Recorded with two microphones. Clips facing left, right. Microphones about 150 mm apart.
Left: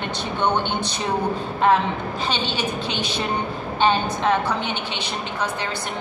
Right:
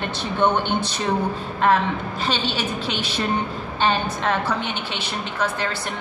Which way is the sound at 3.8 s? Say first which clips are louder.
Left 2 dB; 15° left (ahead or behind).